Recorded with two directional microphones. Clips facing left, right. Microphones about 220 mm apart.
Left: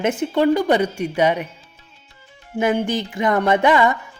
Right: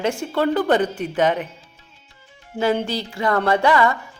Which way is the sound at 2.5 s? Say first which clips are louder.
Left 1 dB; 15° left (ahead or behind).